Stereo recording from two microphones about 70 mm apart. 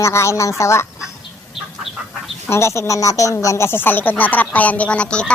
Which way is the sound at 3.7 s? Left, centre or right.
Left.